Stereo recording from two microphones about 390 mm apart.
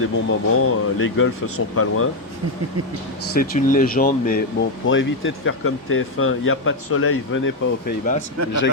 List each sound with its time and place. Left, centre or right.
0.0 s speech: left
3.3 s speech: left